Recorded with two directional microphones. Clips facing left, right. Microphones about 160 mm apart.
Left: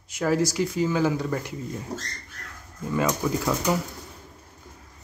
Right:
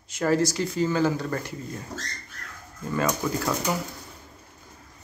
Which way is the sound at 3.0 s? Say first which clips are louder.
Left 1 dB; 5° left (ahead or behind).